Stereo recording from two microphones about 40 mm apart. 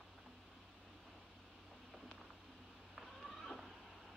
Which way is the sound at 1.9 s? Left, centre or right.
Centre.